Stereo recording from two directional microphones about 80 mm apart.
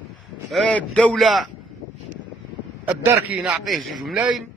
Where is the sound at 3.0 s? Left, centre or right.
Right.